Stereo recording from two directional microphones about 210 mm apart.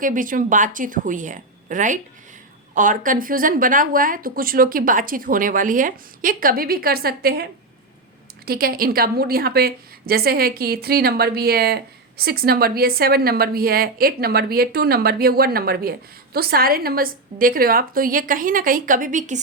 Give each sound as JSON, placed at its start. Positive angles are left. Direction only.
{"t": 0.0, "sound": "a woman's voice", "side_deg": -40}
{"t": 8.4, "sound": "a woman's voice", "side_deg": -45}